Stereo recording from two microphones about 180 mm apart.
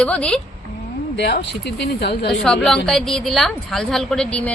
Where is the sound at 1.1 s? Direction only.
70° left (ahead or behind).